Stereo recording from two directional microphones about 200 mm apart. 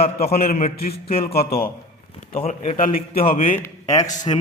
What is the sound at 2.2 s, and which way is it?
Speech, 35° left (ahead or behind).